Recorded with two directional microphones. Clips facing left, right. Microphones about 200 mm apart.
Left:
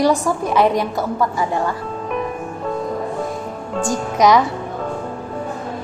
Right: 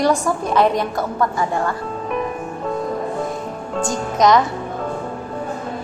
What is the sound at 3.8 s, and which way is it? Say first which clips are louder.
Speech: left 1 dB; 10° left (ahead or behind).